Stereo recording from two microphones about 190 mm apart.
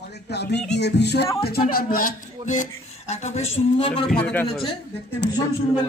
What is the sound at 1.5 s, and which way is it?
Speech, 50° left (ahead or behind).